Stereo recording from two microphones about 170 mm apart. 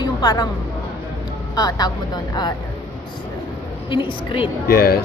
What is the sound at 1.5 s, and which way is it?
Speech, 25° left (ahead or behind).